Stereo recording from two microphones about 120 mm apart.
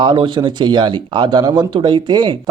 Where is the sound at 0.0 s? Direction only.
40° right (ahead or behind).